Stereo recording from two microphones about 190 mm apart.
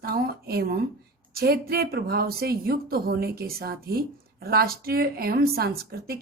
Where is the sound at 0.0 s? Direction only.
55° right (ahead or behind).